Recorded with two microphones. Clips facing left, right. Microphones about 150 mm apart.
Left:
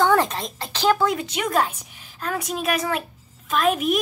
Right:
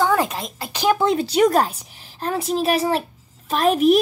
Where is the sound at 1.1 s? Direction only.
35° right (ahead or behind).